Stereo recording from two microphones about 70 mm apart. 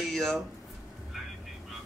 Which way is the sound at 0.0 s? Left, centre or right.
Centre.